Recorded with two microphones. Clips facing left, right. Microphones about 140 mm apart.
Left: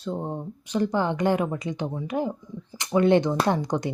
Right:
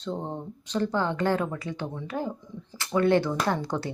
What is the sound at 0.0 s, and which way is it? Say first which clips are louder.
A woman's voice: left 2 dB; 10° left (ahead or behind).